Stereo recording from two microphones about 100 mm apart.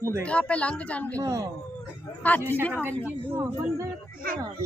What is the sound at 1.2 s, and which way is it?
Speech, 30° right (ahead or behind).